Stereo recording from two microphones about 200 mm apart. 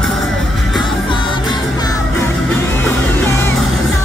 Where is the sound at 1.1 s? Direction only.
25° left (ahead or behind).